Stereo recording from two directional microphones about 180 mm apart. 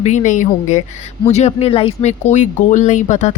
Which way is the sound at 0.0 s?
40° left (ahead or behind).